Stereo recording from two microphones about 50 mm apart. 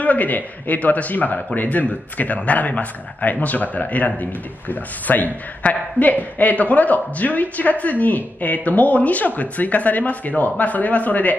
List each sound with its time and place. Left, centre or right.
0.0 s a man's voice: left